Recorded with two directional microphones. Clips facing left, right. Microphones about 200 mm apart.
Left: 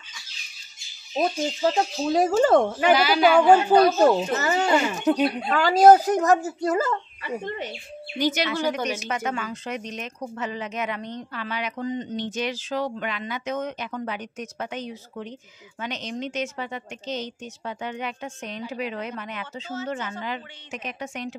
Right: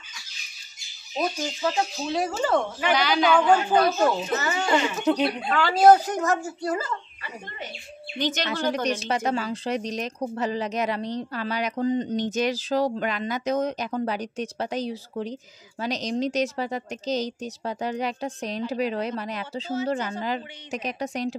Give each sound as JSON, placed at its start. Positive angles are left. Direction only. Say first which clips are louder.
{"t": 1.1, "sound": "speech", "louder": "left 3 dB", "side_deg": 30}
{"t": 2.9, "sound": "a woman's voice", "louder": "left 2 dB", "side_deg": 5}
{"t": 3.3, "sound": "speech", "louder": "left 5 dB", "side_deg": 35}
{"t": 5.0, "sound": "speech", "louder": "left 2 dB", "side_deg": 5}
{"t": 5.5, "sound": "speech", "louder": "left 2 dB", "side_deg": 40}
{"t": 8.2, "sound": "a woman's voice", "louder": "left 2 dB", "side_deg": 10}
{"t": 9.1, "sound": "speech", "louder": "right 3 dB", "side_deg": -35}